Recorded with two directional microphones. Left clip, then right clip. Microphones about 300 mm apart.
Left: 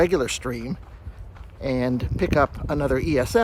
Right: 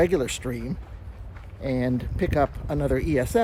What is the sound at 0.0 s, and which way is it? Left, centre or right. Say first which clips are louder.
Speech: left 2 dB; centre.